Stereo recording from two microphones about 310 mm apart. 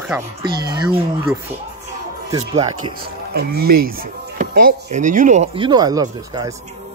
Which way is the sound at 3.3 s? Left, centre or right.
Right.